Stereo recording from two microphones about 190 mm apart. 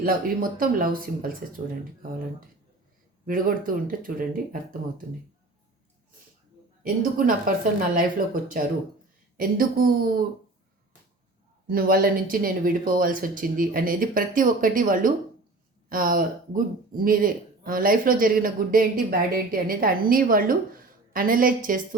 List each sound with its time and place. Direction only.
0.5 s speech: 50° right (ahead or behind)
3.2 s speech: 45° right (ahead or behind)
6.8 s speech: 45° right (ahead or behind)
11.7 s speech: 50° right (ahead or behind)